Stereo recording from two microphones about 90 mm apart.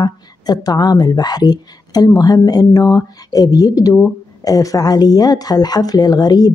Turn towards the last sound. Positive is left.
turn(degrees=50)  # may be behind; listen again after turning